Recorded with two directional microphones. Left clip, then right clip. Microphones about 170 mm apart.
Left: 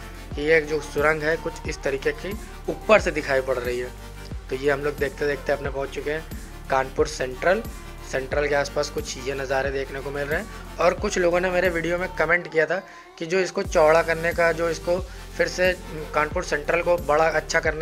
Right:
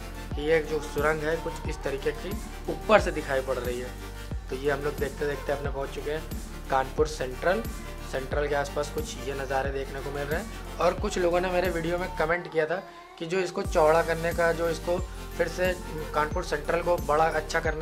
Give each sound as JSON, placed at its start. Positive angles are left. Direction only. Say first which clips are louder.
{"t": 0.4, "sound": "speech", "louder": "left 5 dB", "side_deg": 20}